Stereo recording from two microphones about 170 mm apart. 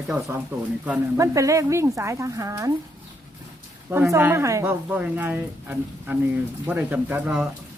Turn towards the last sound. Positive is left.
turn(degrees=-5)  # may be behind; listen again after turning